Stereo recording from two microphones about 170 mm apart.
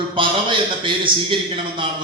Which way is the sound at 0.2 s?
30° right (ahead or behind).